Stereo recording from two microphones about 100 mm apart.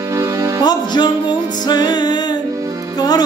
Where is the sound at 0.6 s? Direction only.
45° left (ahead or behind).